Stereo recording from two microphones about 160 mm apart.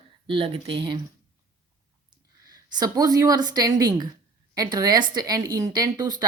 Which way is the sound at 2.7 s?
25° right (ahead or behind).